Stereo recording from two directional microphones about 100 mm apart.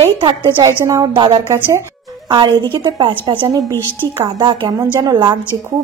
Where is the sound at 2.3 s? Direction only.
55° right (ahead or behind).